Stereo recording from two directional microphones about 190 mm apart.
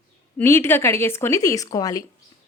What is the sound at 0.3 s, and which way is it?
Speech, 10° left (ahead or behind).